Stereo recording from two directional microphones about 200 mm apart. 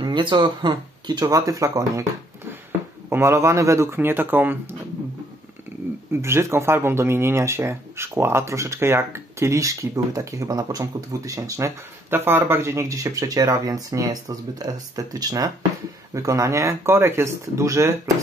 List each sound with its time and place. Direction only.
0.0 s speech: 25° right (ahead or behind)
3.1 s speech: 15° right (ahead or behind)
6.2 s speech: 15° right (ahead or behind)